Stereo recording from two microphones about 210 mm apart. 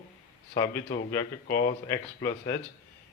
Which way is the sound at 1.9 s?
15° left (ahead or behind).